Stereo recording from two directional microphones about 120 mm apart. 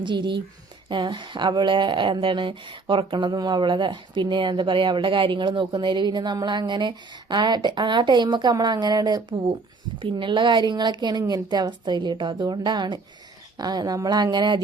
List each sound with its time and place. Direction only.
0.0 s speech: 40° right (ahead or behind)